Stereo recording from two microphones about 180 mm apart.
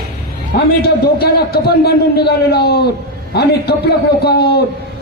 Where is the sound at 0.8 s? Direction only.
60° left (ahead or behind).